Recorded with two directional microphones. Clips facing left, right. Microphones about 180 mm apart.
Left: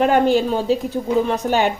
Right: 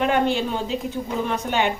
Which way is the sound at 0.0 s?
40° left (ahead or behind).